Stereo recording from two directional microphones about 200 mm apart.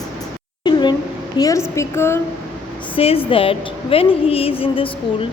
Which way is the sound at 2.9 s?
30° left (ahead or behind).